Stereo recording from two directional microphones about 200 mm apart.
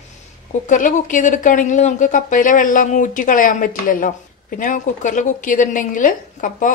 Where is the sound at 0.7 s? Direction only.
40° left (ahead or behind).